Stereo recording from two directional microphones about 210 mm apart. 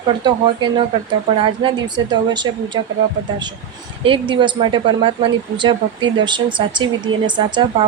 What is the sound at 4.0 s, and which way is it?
Speech, 25° right (ahead or behind).